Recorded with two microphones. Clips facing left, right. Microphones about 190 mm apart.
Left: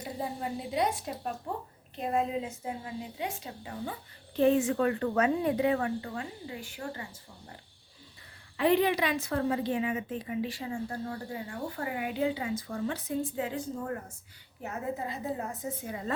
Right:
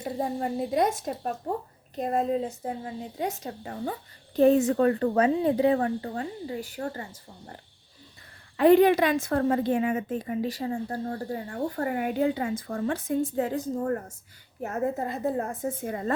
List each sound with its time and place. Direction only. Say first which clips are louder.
0.0 s a woman's voice: right 6 dB; 45° right (ahead or behind)
8.5 s a woman's voice: right 8 dB; 50° right (ahead or behind)